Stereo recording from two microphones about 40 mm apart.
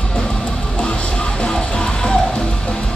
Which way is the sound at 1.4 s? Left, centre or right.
Left.